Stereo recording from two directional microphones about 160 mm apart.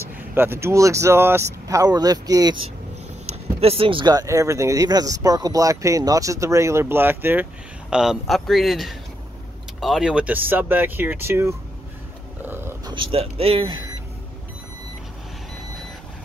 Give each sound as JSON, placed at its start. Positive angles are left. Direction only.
{"t": 0.3, "sound": "speech", "side_deg": -15}
{"t": 3.3, "sound": "a man's voice", "side_deg": -40}
{"t": 12.4, "sound": "a sound", "side_deg": -15}
{"t": 12.8, "sound": "speech", "side_deg": -30}